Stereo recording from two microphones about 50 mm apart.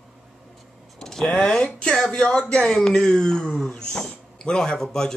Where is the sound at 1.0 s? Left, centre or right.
Centre.